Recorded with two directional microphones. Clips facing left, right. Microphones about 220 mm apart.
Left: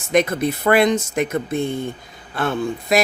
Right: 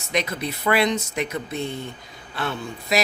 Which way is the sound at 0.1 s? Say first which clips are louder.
Left 8 dB; 50° left (ahead or behind).